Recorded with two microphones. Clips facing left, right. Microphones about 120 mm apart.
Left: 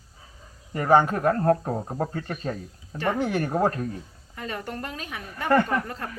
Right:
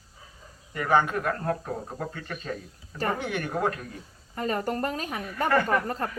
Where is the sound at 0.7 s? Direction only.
35° left (ahead or behind).